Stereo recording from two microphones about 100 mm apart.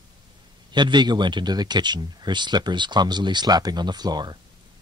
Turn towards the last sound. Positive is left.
turn(degrees=-45)  # may be behind; listen again after turning